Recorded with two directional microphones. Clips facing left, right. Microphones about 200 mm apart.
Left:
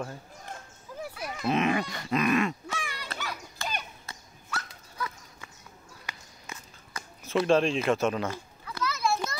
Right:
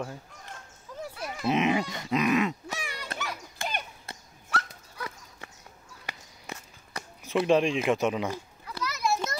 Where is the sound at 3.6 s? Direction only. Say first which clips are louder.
Right 3 dB; 55° right (ahead or behind).